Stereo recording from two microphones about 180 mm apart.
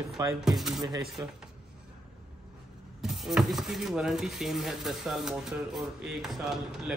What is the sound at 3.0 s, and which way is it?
Speech, centre (ahead or behind).